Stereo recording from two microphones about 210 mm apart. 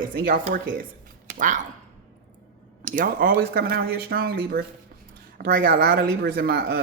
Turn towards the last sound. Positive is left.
turn(degrees=-45)  # may be behind; listen again after turning